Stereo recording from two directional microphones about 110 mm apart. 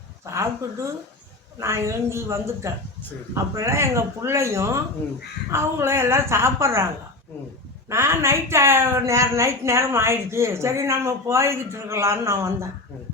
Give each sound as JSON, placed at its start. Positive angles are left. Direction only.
{"t": 0.3, "sound": "speech", "side_deg": -25}
{"t": 1.5, "sound": "a woman's voice", "side_deg": -25}
{"t": 7.9, "sound": "a woman's voice", "side_deg": -25}